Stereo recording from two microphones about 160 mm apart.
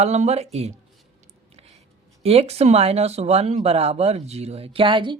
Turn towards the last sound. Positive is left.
turn(degrees=-30)  # may be behind; listen again after turning